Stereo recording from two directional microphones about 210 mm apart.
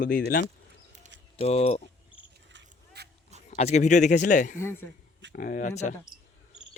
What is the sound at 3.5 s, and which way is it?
Speech, 35° left (ahead or behind).